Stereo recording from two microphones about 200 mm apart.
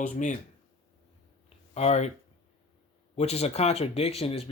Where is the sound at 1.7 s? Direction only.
35° left (ahead or behind).